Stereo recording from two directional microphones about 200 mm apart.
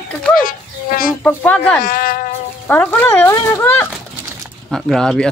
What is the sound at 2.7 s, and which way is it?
Speech, 10° left (ahead or behind).